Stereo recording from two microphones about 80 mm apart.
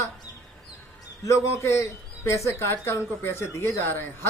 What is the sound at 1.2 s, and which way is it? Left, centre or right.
Speech, left.